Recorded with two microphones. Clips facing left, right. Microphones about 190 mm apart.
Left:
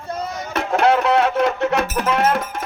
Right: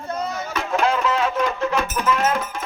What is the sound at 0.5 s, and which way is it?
Music, 70° left (ahead or behind).